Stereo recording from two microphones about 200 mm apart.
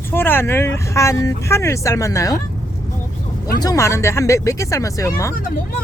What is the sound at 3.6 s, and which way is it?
Speech, 15° left (ahead or behind).